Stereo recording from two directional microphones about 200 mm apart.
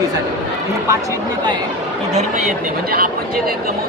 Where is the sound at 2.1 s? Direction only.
35° right (ahead or behind).